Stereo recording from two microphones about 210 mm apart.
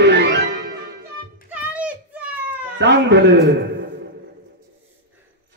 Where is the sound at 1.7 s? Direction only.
5° right (ahead or behind).